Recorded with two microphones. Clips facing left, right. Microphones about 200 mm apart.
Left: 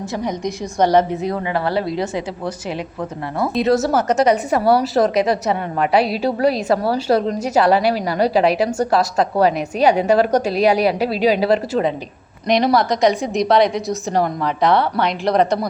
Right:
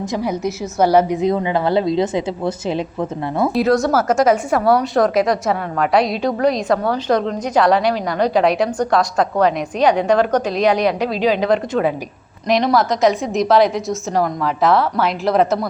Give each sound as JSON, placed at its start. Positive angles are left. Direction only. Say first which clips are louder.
{"t": 0.0, "sound": "a woman's voice", "louder": "right 2 dB", "side_deg": -10}
{"t": 3.4, "sound": "a woman's voice", "louder": "right 1 dB", "side_deg": 0}